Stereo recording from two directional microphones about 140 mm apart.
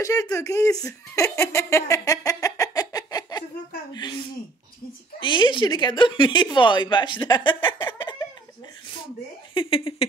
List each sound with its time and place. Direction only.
0.0 s a woman's voice: 25° left (ahead or behind)
5.2 s a woman's voice: 35° left (ahead or behind)